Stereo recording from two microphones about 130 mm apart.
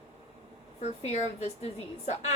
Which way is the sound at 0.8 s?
60° left (ahead or behind).